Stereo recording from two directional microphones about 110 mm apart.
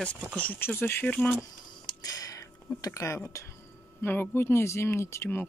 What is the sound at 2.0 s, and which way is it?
Speech, 30° left (ahead or behind).